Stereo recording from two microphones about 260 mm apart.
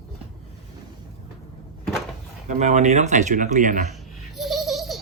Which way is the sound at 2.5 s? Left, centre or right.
Right.